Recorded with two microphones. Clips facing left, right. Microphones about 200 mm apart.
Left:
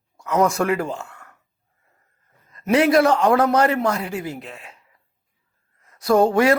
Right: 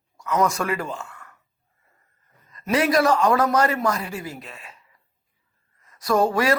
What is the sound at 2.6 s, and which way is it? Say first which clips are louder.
Speech: left 4 dB; 60° left (ahead or behind).